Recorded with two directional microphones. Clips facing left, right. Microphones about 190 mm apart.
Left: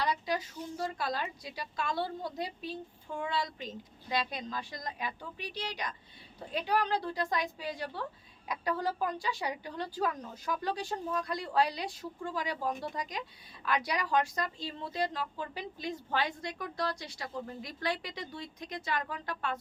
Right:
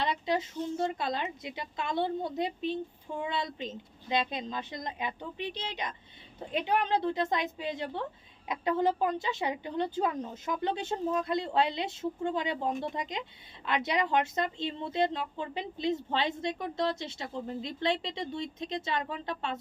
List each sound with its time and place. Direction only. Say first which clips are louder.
0.0 s speech: right 2 dB; 25° right (ahead or behind)